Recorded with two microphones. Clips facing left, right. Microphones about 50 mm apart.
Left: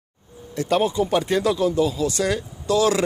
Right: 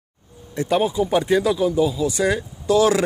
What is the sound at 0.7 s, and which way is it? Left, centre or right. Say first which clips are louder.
Speech: even; centre.